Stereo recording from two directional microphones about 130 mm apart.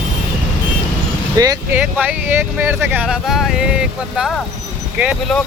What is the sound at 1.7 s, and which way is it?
Speech, 10° right (ahead or behind).